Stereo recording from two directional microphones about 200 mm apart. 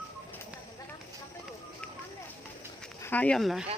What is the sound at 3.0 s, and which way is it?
Speech, 10° left (ahead or behind).